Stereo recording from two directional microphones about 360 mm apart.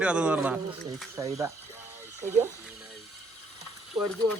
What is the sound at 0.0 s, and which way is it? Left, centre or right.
Speech, centre.